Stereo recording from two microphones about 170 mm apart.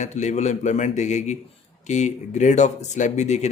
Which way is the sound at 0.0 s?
45° left (ahead or behind).